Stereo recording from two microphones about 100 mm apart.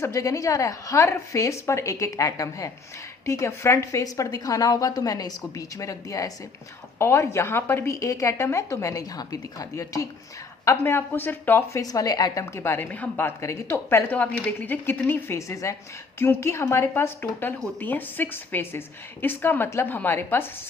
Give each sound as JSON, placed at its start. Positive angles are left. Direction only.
{"t": 0.0, "sound": "a woman's voice", "side_deg": 35}
{"t": 11.8, "sound": "a woman's voice", "side_deg": 35}